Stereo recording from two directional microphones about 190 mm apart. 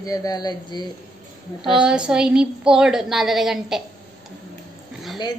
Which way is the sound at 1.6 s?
5° right (ahead or behind).